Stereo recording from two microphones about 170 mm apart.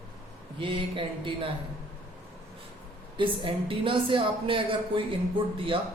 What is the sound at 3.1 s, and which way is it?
A woman's voice, 30° right (ahead or behind).